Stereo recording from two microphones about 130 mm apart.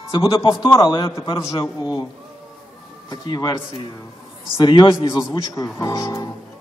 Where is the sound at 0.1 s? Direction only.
40° left (ahead or behind).